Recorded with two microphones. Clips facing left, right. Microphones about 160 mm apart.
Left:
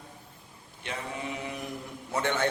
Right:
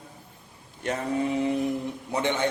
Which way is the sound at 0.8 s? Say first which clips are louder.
Right 10 dB; 45° right (ahead or behind).